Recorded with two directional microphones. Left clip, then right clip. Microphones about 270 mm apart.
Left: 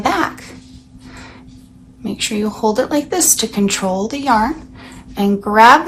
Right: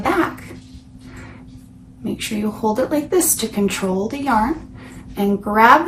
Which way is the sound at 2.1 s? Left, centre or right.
Centre.